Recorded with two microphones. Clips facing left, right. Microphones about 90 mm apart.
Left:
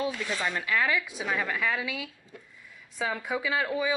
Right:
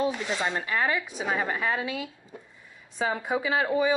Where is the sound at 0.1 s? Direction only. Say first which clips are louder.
Right 2 dB; 25° right (ahead or behind).